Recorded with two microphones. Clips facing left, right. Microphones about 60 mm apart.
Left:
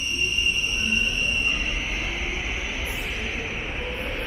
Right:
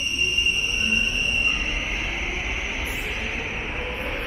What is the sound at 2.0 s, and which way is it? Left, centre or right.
Vehicle, centre.